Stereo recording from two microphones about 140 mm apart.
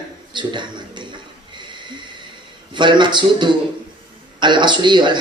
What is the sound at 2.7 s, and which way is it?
Speech, 35° right (ahead or behind).